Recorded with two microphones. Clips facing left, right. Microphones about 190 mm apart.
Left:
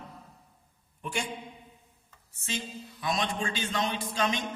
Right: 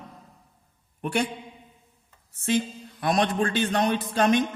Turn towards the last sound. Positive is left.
turn(degrees=-50)  # may be behind; listen again after turning